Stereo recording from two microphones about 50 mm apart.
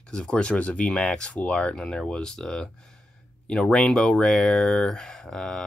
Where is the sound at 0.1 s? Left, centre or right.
Centre.